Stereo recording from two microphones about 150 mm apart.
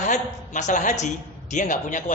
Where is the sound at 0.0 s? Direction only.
55° left (ahead or behind).